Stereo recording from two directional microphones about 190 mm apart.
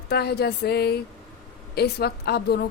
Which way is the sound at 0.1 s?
55° left (ahead or behind).